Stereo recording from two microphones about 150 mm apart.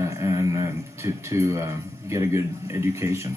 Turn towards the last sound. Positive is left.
turn(degrees=-20)  # may be behind; listen again after turning